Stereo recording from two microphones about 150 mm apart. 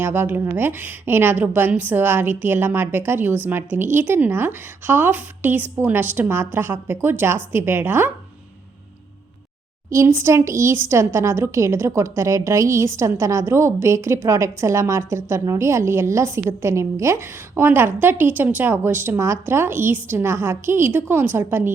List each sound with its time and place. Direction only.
0.0 s a woman's voice: 15° right (ahead or behind)
9.9 s a woman's voice: 20° right (ahead or behind)